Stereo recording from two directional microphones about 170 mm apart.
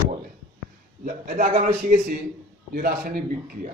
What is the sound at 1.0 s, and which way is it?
A man's voice, 60° right (ahead or behind).